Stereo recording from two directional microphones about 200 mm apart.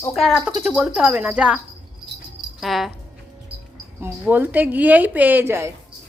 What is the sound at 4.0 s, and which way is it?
A woman's voice, 10° right (ahead or behind).